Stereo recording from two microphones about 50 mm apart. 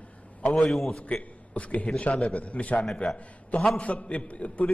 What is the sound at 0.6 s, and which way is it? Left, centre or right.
Speech, centre.